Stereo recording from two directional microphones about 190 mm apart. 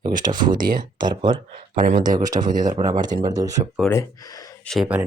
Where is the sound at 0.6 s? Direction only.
45° right (ahead or behind).